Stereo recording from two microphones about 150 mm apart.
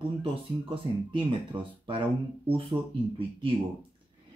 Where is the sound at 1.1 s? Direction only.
35° right (ahead or behind).